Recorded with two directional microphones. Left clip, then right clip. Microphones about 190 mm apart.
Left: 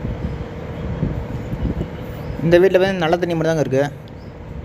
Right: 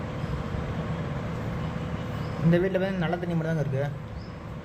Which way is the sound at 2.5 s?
50° left (ahead or behind).